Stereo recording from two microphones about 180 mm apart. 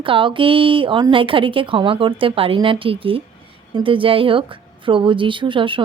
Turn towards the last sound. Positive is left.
turn(degrees=-25)  # may be behind; listen again after turning